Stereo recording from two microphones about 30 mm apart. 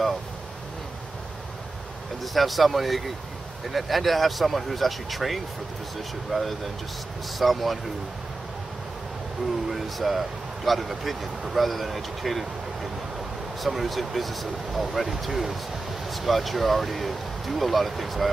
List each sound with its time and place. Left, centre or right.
2.3 s speech: centre
9.7 s speech: centre
13.6 s speech: centre